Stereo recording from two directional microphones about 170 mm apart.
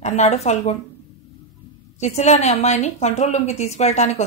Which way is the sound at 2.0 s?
40° left (ahead or behind).